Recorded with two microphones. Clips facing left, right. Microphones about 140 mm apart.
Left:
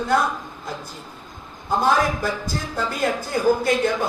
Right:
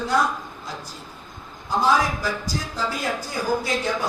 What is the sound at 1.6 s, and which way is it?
Speech, 55° left (ahead or behind).